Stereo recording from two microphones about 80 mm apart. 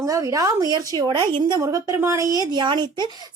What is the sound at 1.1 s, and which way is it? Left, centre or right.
Speech, right.